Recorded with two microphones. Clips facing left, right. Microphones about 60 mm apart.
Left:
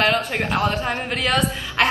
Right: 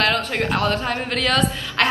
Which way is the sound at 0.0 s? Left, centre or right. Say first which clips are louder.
Even; centre.